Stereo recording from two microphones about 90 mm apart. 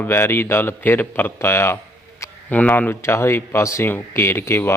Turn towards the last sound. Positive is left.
turn(degrees=25)  # may be behind; listen again after turning